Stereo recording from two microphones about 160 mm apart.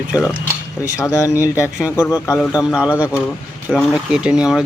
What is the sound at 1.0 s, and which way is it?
A man's voice, 20° left (ahead or behind).